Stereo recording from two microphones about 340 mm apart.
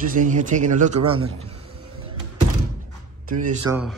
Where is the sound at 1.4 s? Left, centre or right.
Right.